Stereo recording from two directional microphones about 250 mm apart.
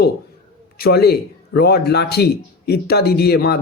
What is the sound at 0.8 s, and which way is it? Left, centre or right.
Speech, left.